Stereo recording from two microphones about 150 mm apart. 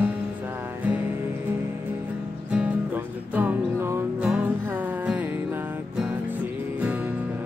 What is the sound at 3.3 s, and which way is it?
Music, 10° right (ahead or behind).